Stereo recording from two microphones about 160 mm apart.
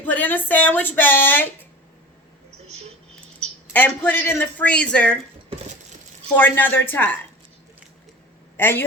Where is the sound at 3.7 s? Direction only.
10° left (ahead or behind).